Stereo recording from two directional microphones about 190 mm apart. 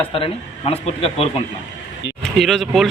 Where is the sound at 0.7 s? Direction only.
30° left (ahead or behind).